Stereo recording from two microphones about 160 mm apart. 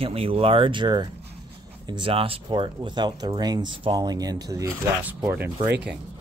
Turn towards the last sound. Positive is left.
turn(degrees=-10)  # may be behind; listen again after turning